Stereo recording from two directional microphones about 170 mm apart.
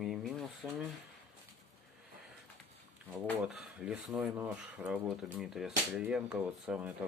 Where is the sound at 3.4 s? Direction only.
5° right (ahead or behind).